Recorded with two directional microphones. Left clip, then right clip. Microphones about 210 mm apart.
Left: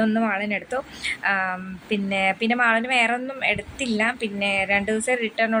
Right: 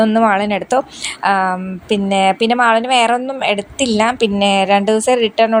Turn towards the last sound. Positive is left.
turn(degrees=-25)  # may be behind; listen again after turning